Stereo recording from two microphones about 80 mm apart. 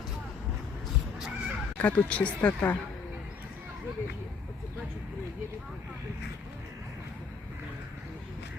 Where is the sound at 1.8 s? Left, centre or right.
Centre.